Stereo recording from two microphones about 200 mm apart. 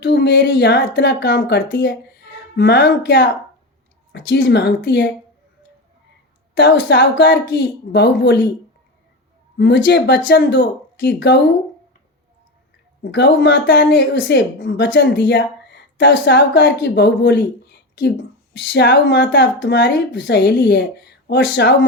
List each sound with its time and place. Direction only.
0.0 s speech: 60° left (ahead or behind)
6.5 s speech: 65° left (ahead or behind)
9.6 s speech: 60° left (ahead or behind)
13.0 s speech: 60° left (ahead or behind)